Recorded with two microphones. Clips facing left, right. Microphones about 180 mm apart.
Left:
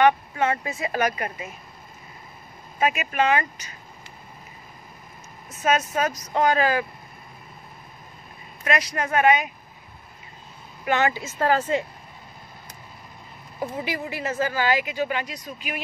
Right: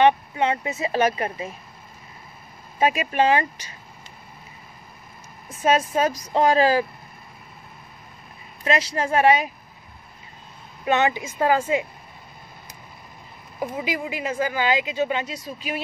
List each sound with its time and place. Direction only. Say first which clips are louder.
0.0 s speech: right 1 dB; 20° right (ahead or behind)
2.8 s speech: right 3 dB; 30° right (ahead or behind)
5.5 s speech: right 3 dB; 30° right (ahead or behind)
8.6 s speech: right 2 dB; 30° right (ahead or behind)
10.9 s speech: right 2 dB; 20° right (ahead or behind)
13.6 s speech: right 2 dB; 10° right (ahead or behind); by 15.8 s 30° right (ahead or behind)